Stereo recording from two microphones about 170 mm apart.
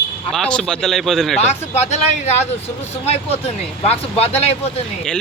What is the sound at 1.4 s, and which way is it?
Speech, 40° left (ahead or behind).